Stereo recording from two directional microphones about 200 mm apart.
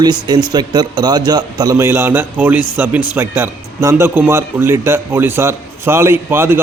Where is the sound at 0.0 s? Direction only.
20° right (ahead or behind).